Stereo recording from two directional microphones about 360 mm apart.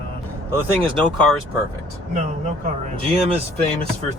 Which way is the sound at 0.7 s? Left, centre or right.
Centre.